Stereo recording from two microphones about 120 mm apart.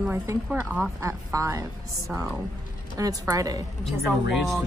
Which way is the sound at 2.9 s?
30° right (ahead or behind).